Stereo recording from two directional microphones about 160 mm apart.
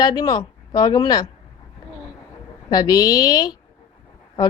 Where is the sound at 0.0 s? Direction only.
25° left (ahead or behind).